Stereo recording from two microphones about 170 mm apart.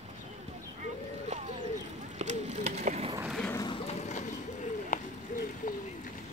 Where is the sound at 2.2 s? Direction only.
45° right (ahead or behind).